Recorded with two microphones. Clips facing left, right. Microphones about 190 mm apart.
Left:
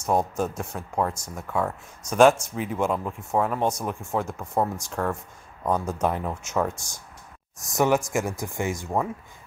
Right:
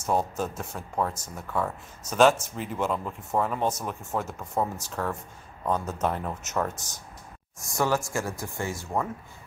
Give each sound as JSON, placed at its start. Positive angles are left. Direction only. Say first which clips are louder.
{"t": 0.0, "sound": "speech", "louder": "left 3 dB", "side_deg": 10}